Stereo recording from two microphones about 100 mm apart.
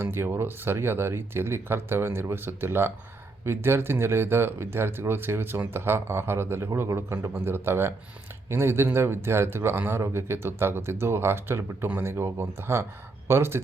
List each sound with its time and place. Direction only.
0.0 s speech: 25° right (ahead or behind)